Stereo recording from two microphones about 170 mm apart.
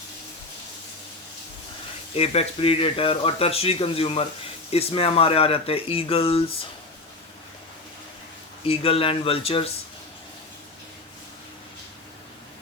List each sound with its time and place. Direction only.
2.1 s speech: 35° left (ahead or behind)
8.6 s speech: 35° left (ahead or behind)